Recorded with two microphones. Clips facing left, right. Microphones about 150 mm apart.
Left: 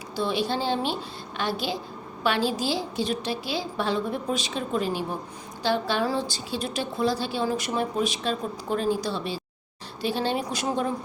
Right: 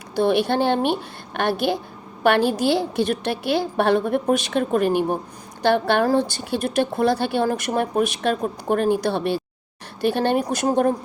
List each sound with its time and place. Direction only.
0.2 s a woman's voice: 60° right (ahead or behind)